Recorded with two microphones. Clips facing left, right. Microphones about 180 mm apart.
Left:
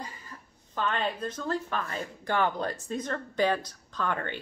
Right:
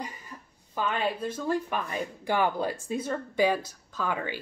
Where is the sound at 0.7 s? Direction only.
10° right (ahead or behind).